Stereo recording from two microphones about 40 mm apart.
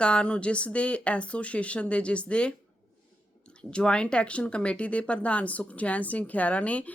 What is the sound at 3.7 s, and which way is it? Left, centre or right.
Speech, left.